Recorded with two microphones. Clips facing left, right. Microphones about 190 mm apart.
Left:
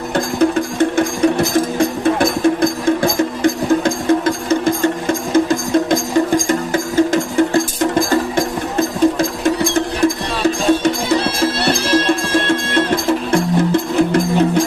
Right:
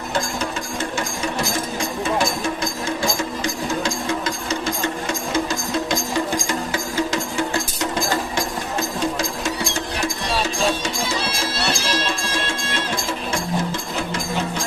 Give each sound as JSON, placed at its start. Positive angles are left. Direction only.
{"t": 0.1, "sound": "music", "side_deg": 60}